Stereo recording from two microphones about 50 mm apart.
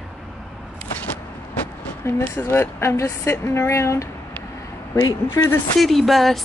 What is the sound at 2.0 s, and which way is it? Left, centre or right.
Speech, left.